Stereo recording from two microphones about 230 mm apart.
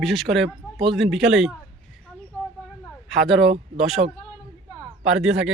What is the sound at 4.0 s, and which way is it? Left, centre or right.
Speech, right.